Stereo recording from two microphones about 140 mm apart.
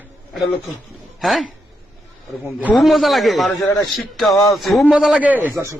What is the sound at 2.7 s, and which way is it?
A man's voice, centre (ahead or behind).